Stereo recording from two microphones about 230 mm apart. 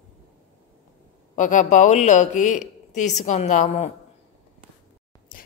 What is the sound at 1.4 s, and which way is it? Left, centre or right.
Speech, left.